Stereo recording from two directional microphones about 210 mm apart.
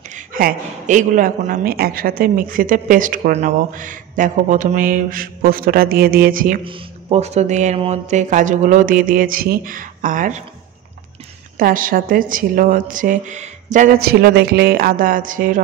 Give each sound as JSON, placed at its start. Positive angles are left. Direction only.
{"t": 0.1, "sound": "a woman's voice", "side_deg": -40}
{"t": 6.6, "sound": "a woman's voice", "side_deg": -30}
{"t": 11.5, "sound": "a woman's voice", "side_deg": -40}